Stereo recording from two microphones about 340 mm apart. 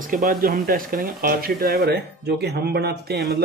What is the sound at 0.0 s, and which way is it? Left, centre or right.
Speech, right.